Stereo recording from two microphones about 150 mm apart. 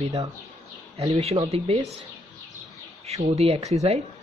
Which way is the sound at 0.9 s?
45° right (ahead or behind).